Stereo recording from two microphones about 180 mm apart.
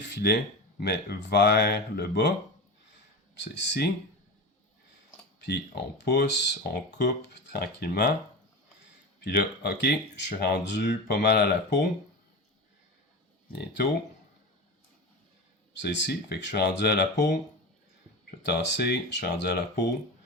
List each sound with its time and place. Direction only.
0.1 s speech: 65° left (ahead or behind)
3.3 s speech: 75° left (ahead or behind)
5.5 s speech: 65° left (ahead or behind)
9.2 s speech: 65° left (ahead or behind)
15.7 s speech: 80° left